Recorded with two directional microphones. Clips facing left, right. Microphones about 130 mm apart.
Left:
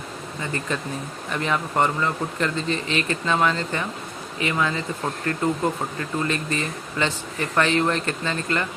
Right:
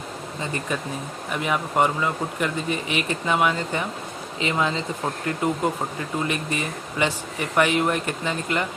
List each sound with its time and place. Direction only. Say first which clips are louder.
1.3 s speech: even; 10° right (ahead or behind)